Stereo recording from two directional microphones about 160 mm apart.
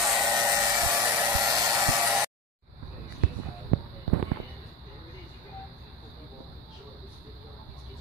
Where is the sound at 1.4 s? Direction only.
20° right (ahead or behind).